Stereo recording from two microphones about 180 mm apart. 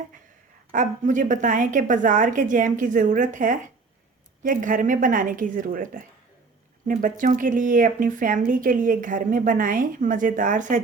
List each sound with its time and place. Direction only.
0.7 s speech: 45° right (ahead or behind)